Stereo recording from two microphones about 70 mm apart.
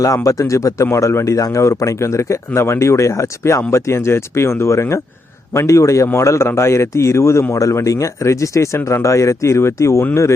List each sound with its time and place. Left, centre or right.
0.0 s speech: left